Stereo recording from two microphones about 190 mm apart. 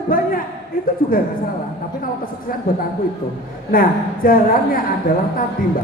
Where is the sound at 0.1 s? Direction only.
50° left (ahead or behind).